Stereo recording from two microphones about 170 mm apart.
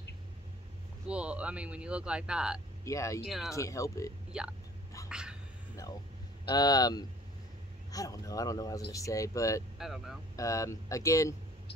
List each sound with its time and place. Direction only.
1.0 s speech: 5° right (ahead or behind)
2.8 s speech: 20° left (ahead or behind)
3.3 s speech: centre (ahead or behind)
3.5 s speech: 20° left (ahead or behind)
4.3 s speech: 5° right (ahead or behind)
5.1 s a sound: 5° right (ahead or behind)
6.4 s speech: 25° left (ahead or behind)
9.8 s speech: centre (ahead or behind)
10.3 s speech: 20° left (ahead or behind)